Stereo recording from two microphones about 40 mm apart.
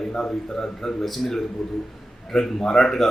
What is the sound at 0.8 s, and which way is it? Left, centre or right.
Speech, centre.